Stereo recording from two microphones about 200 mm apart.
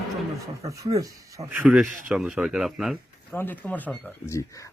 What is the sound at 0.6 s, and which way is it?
Speech, 15° right (ahead or behind).